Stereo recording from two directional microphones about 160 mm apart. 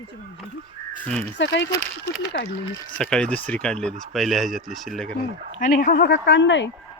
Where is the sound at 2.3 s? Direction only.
90° left.